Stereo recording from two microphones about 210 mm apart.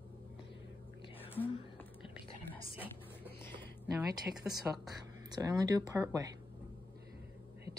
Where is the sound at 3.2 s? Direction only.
10° left (ahead or behind).